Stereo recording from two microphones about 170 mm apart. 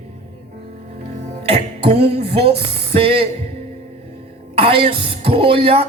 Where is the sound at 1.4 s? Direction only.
35° right (ahead or behind).